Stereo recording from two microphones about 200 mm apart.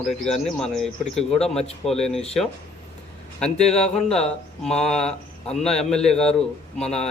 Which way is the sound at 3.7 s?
5° left (ahead or behind).